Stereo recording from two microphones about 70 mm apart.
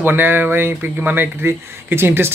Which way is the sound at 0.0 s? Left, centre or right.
Right.